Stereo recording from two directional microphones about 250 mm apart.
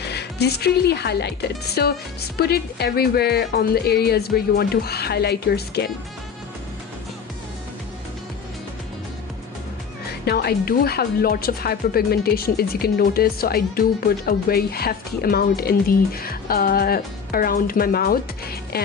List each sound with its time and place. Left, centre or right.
0.0 s speech: left
10.1 s speech: left